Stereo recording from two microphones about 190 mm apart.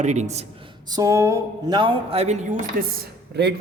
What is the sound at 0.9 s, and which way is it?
Speech, 15° right (ahead or behind).